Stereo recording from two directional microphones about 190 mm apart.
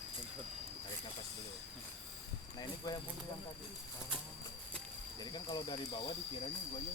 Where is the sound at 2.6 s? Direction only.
20° left (ahead or behind).